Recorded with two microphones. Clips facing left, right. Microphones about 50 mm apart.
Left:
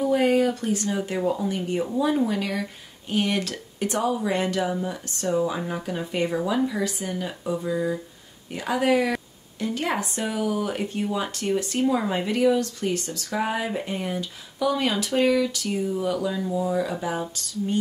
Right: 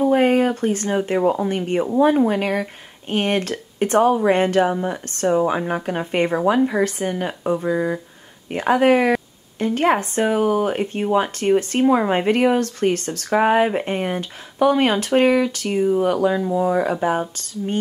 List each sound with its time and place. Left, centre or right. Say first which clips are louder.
0.0 s speech: right 4 dB; right